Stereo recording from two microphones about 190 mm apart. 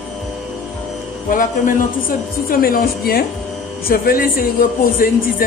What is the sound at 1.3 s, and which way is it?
Speech, 45° left (ahead or behind).